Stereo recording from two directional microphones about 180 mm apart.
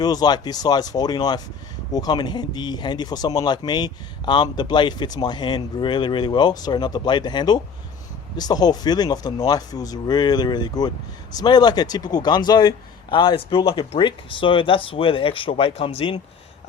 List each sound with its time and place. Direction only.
0.0 s speech: 20° left (ahead or behind)